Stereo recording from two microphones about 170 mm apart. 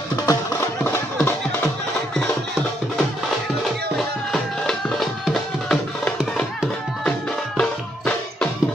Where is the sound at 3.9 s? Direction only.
5° left (ahead or behind).